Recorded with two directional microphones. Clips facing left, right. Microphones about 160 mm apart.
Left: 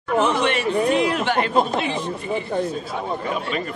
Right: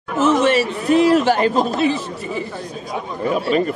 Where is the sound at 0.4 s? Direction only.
40° right (ahead or behind).